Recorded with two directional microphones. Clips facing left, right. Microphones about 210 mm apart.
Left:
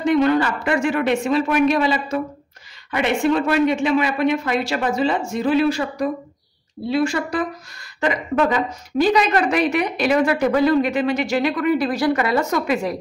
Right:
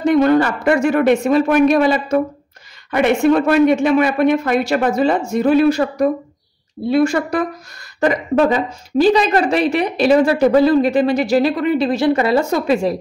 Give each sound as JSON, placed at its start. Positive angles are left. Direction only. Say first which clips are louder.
{"t": 0.0, "sound": "speech", "louder": "right 4 dB", "side_deg": -45}
{"t": 8.0, "sound": "a woman's voice", "louder": "right 5 dB", "side_deg": -35}